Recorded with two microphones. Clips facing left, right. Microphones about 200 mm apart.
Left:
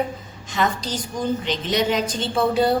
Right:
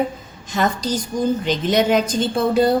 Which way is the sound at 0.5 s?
45° right (ahead or behind).